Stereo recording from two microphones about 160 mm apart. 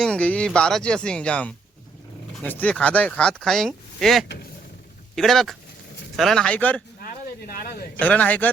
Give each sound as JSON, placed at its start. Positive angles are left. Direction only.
{"t": 0.0, "sound": "speech", "side_deg": 10}
{"t": 7.0, "sound": "a sound", "side_deg": 65}
{"t": 7.9, "sound": "speech", "side_deg": 10}